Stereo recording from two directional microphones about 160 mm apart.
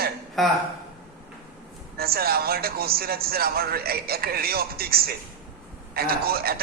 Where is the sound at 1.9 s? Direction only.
75° right (ahead or behind).